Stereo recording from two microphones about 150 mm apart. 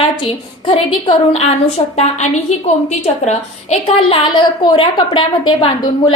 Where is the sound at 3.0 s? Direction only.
45° left (ahead or behind); by 5.7 s 30° left (ahead or behind).